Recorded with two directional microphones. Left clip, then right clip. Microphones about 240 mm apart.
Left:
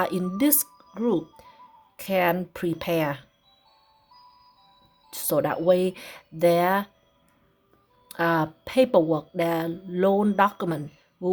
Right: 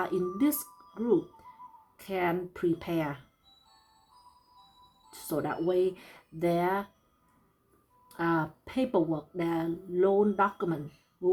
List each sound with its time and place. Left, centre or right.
0.0 s speech: left
5.1 s speech: left
8.0 s speech: left